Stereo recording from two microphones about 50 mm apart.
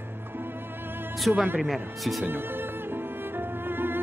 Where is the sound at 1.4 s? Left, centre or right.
Right.